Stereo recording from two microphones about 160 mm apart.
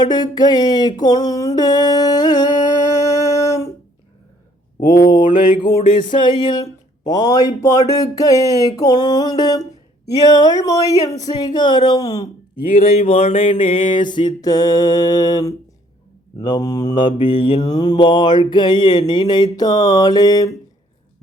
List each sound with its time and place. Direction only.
0.0 s speech: 25° left (ahead or behind)
3.1 s a sound: 20° left (ahead or behind)
4.9 s mantra: 25° left (ahead or behind)
5.5 s speech: 25° left (ahead or behind)
5.8 s music: 50° left (ahead or behind)
6.1 s speech: 30° left (ahead or behind)
12.7 s speech: 40° left (ahead or behind); by 20.5 s 25° left (ahead or behind)